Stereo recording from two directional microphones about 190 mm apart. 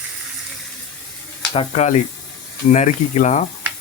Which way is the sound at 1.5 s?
35° left (ahead or behind).